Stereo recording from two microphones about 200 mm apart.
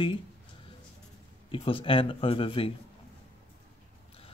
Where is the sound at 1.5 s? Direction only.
25° left (ahead or behind).